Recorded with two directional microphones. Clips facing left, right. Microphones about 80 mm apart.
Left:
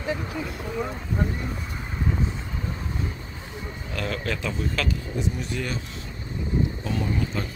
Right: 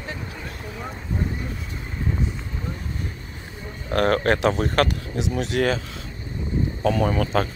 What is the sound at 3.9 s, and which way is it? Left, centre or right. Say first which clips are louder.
Speech: right 10 dB; right.